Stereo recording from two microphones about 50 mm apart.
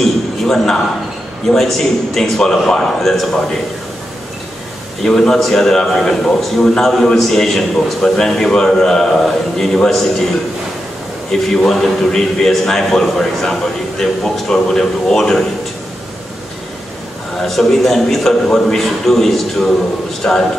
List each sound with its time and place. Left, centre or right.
0.0 s a sound: centre
1.5 s a man's voice: centre
5.0 s a man's voice: centre
11.5 s a man's voice: centre
17.4 s a man's voice: centre
20.2 s a man's voice: centre